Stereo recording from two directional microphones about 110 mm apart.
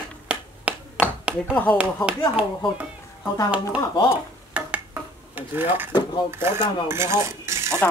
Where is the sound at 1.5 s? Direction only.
15° left (ahead or behind).